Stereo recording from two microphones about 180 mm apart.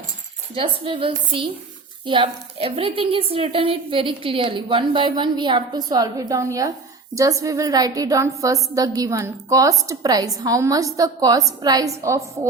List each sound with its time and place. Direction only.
0.5 s a woman's voice: 30° right (ahead or behind)